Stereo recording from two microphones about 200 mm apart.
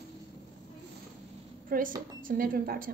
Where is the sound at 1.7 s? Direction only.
45° right (ahead or behind).